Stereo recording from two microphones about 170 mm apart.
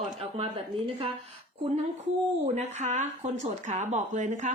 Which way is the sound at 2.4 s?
40° right (ahead or behind).